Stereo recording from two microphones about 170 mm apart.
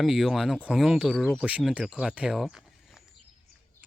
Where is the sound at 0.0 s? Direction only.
Centre (ahead or behind).